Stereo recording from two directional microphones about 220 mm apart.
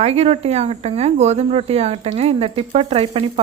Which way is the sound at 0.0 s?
30° right (ahead or behind).